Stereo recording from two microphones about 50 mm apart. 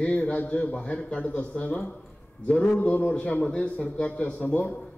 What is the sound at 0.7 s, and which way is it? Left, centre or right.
Speech, left.